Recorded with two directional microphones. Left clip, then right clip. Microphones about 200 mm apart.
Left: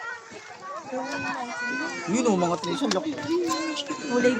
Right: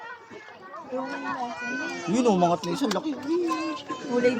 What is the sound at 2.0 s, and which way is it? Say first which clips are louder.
Speech: right 3 dB; 40° right (ahead or behind).